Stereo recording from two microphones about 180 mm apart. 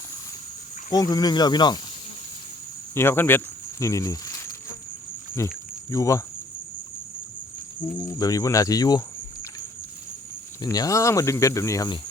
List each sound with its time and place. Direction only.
0.9 s speech: 20° left (ahead or behind)
2.9 s speech: 15° left (ahead or behind)
7.8 s cricket: 25° left (ahead or behind)
10.6 s speech: 20° left (ahead or behind)